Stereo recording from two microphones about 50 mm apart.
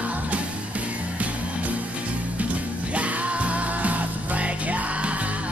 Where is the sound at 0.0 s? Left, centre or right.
Right.